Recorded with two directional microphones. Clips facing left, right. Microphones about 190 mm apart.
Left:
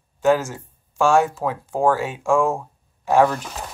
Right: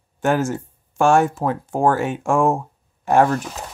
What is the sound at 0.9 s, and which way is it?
Speech, 55° right (ahead or behind).